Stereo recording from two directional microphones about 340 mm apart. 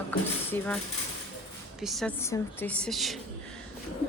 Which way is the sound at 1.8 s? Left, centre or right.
Centre.